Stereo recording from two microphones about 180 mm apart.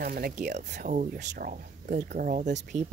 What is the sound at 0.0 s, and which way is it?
Speech, 55° right (ahead or behind).